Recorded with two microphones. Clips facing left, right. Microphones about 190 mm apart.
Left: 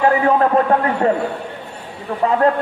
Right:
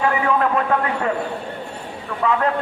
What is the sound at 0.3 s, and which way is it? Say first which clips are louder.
Speech: left 5 dB; 35° left (ahead or behind).